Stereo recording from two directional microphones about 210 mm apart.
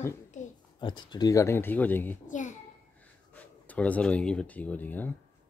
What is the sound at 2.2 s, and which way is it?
Speech, 35° left (ahead or behind).